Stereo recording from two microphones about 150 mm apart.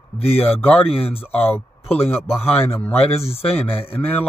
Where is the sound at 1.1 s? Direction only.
15° left (ahead or behind).